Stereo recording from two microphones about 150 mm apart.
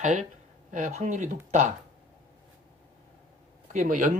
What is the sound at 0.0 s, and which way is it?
Speech, 55° right (ahead or behind).